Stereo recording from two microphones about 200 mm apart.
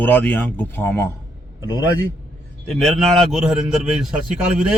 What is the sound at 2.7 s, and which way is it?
Speech, centre (ahead or behind).